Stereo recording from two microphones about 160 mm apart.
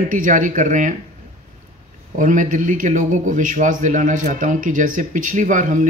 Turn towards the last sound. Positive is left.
turn(degrees=-55)  # may be behind; listen again after turning